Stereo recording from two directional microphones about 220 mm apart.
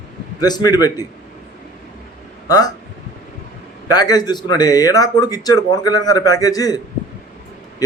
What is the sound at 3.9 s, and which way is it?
A man's voice, 15° left (ahead or behind).